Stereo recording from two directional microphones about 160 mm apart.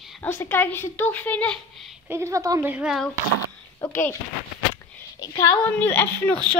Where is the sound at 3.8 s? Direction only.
15° left (ahead or behind).